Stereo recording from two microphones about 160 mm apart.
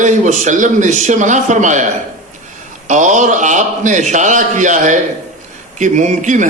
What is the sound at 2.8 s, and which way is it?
A man's voice, 50° right (ahead or behind).